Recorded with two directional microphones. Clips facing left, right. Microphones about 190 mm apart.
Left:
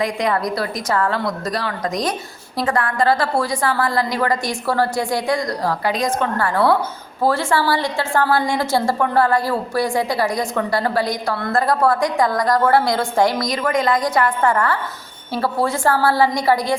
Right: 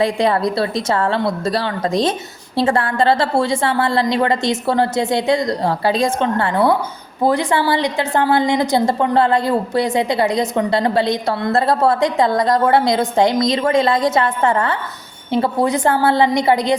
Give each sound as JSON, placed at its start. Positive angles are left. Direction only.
{"t": 0.0, "sound": "a woman's voice", "side_deg": -30}